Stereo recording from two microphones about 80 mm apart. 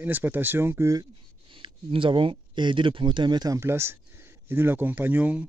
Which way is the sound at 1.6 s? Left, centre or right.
Right.